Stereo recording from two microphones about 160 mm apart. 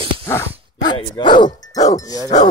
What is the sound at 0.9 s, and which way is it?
Dog, 30° left (ahead or behind).